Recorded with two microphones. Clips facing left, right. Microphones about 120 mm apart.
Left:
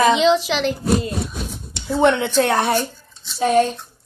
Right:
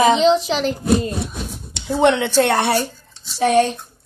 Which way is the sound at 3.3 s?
90° right.